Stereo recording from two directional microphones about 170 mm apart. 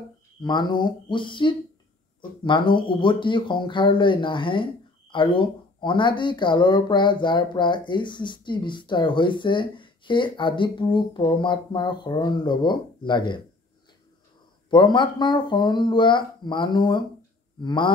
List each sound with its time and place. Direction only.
0.4 s speech: 25° left (ahead or behind)
14.7 s speech: 25° left (ahead or behind)